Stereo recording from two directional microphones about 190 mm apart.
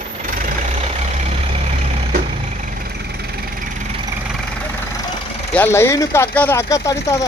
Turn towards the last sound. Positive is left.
turn(degrees=15)  # may be behind; listen again after turning